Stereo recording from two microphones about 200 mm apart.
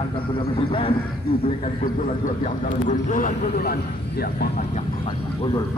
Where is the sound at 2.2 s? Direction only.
40° left (ahead or behind).